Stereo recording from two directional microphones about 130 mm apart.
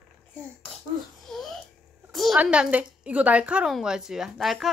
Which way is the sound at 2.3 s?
10° right (ahead or behind).